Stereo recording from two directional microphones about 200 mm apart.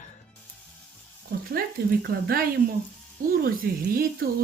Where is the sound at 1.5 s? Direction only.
50° right (ahead or behind).